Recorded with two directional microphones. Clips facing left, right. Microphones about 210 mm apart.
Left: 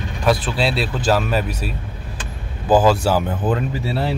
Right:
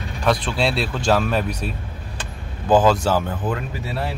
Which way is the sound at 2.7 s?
10° left (ahead or behind).